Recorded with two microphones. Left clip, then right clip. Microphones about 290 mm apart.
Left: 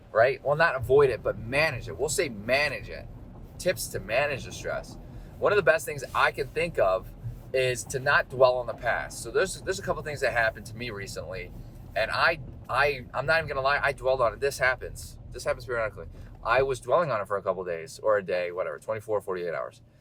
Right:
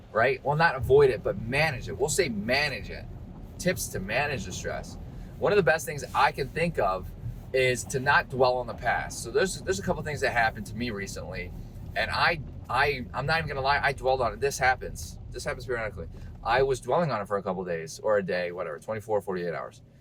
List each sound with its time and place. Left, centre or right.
0.1 s speech: centre